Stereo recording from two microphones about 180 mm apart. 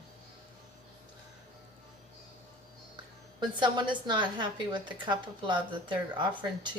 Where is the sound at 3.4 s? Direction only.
25° right (ahead or behind).